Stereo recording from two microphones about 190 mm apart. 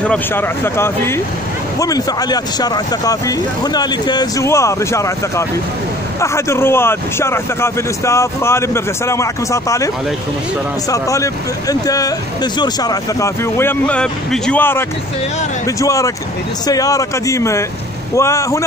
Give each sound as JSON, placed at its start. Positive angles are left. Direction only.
{"t": 0.0, "sound": "speech", "side_deg": 10}
{"t": 10.9, "sound": "speech", "side_deg": 15}